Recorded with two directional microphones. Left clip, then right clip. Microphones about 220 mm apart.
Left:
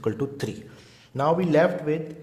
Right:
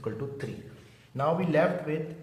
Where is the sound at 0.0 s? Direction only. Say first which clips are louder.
Left 7 dB; 50° left (ahead or behind).